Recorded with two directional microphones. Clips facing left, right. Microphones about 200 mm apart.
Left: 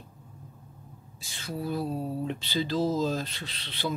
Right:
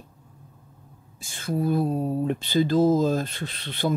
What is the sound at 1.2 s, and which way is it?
Speech, 50° right (ahead or behind).